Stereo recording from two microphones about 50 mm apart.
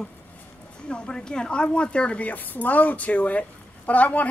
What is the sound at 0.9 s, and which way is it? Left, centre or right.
A woman's voice, centre.